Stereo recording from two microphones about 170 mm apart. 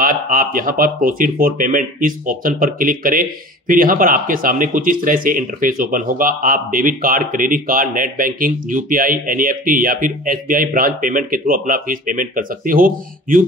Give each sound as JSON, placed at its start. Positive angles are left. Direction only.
{"t": 0.0, "sound": "speech", "side_deg": -55}